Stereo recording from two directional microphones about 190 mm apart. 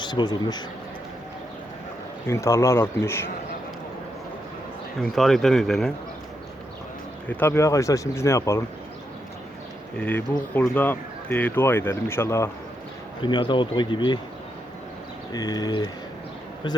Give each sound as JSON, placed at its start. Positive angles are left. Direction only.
{"t": 0.0, "sound": "a man's voice", "side_deg": 25}
{"t": 2.2, "sound": "speech", "side_deg": 15}
{"t": 5.1, "sound": "speech", "side_deg": 0}
{"t": 7.3, "sound": "speech", "side_deg": 10}
{"t": 10.0, "sound": "speech", "side_deg": 10}
{"t": 13.2, "sound": "speech", "side_deg": 25}
{"t": 15.3, "sound": "speech", "side_deg": 20}